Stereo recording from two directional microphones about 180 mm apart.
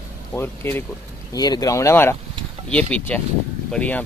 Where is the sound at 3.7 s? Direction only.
5° left (ahead or behind).